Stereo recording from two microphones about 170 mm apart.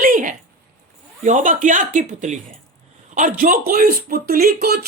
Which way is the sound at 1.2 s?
50° right (ahead or behind).